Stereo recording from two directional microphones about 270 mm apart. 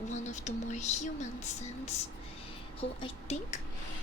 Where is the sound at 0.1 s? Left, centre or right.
Left.